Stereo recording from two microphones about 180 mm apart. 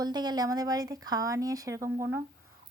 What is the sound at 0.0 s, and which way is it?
A woman's voice, 20° right (ahead or behind).